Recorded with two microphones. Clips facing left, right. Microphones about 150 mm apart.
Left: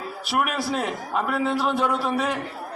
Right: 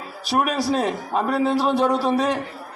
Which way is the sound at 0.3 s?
35° right (ahead or behind).